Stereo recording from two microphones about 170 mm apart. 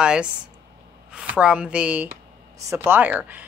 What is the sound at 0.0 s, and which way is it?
A woman's voice, 5° right (ahead or behind).